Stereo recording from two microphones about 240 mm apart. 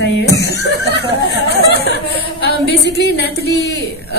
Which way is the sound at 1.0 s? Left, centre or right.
Left.